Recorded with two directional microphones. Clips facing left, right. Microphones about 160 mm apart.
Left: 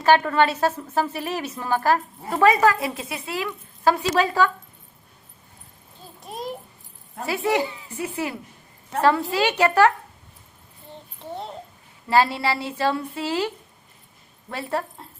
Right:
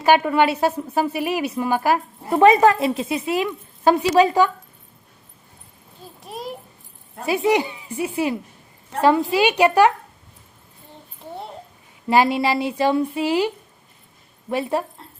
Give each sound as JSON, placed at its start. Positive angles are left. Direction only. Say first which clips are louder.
{"t": 0.0, "sound": "a woman's voice", "louder": "right 2 dB", "side_deg": -15}
{"t": 6.2, "sound": "a sound", "louder": "even", "side_deg": 0}
{"t": 7.3, "sound": "a woman's voice", "louder": "right 4 dB", "side_deg": -15}
{"t": 12.0, "sound": "a woman's voice", "louder": "right 3 dB", "side_deg": -15}
{"t": 14.5, "sound": "a woman's voice", "louder": "right 5 dB", "side_deg": -15}